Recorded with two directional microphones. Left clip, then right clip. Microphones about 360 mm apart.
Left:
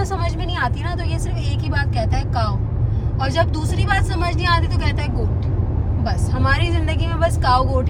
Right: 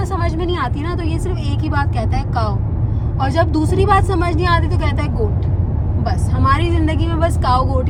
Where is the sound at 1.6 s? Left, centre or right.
Centre.